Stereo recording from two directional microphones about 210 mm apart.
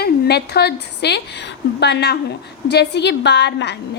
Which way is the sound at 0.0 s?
50° left (ahead or behind).